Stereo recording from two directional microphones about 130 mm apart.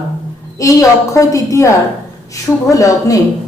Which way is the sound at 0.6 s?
25° left (ahead or behind).